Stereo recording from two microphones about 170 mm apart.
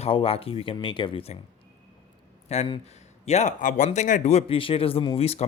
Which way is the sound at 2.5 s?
40° left (ahead or behind).